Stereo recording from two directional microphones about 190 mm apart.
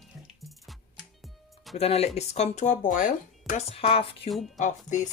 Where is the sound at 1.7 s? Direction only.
35° left (ahead or behind).